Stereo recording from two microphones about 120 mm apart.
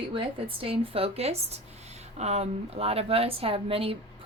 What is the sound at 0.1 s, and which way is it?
A woman's voice, 45° right (ahead or behind).